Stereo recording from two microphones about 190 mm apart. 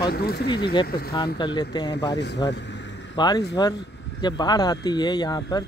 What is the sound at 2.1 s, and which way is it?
Vehicle, 65° left (ahead or behind).